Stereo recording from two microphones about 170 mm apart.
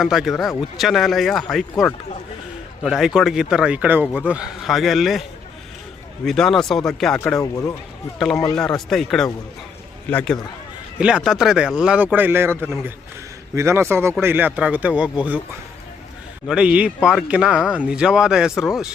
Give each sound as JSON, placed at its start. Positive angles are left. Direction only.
{"t": 0.0, "sound": "speech", "side_deg": 0}
{"t": 2.8, "sound": "speech", "side_deg": 0}
{"t": 6.2, "sound": "speech", "side_deg": 0}
{"t": 7.3, "sound": "speech", "side_deg": 20}
{"t": 8.5, "sound": "speech", "side_deg": 5}
{"t": 10.9, "sound": "speech", "side_deg": -5}
{"t": 16.5, "sound": "speech", "side_deg": -5}